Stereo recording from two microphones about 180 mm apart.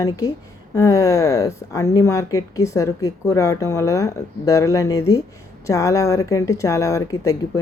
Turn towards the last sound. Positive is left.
turn(degrees=20)  # may be behind; listen again after turning